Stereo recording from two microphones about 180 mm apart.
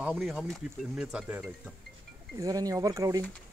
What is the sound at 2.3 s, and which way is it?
Speech, 20° right (ahead or behind).